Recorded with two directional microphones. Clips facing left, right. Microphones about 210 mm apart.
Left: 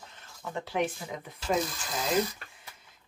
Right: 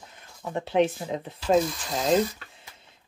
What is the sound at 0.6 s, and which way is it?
Speech, 25° right (ahead or behind).